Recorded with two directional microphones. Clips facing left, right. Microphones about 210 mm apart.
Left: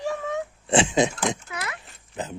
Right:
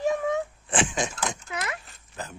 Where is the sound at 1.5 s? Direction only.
25° right (ahead or behind).